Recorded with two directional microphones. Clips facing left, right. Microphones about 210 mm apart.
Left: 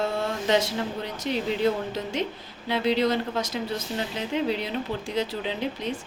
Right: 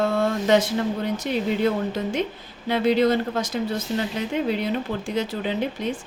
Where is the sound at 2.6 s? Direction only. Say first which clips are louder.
Right 4 dB; 50° right (ahead or behind).